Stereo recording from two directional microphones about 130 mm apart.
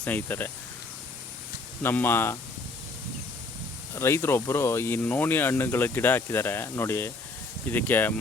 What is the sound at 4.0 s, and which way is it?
Speech, 20° left (ahead or behind).